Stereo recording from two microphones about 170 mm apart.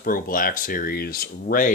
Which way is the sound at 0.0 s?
55° left (ahead or behind).